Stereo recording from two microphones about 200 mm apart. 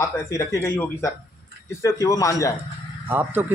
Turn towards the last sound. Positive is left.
turn(degrees=-10)  # may be behind; listen again after turning